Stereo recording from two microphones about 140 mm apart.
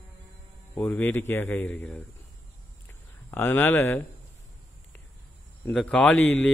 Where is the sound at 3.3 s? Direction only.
15° left (ahead or behind).